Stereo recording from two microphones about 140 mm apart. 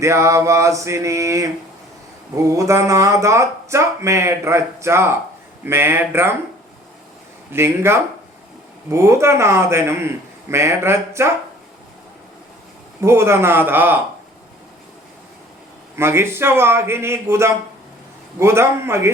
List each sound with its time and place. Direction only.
0.0 s speech: 20° right (ahead or behind)
7.5 s speech: 15° right (ahead or behind)
13.0 s speech: 20° right (ahead or behind)
16.0 s speech: 20° right (ahead or behind)